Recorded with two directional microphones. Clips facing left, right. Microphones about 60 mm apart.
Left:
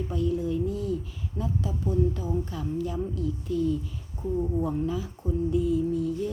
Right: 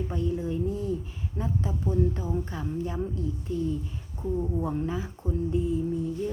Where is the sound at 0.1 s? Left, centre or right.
Right.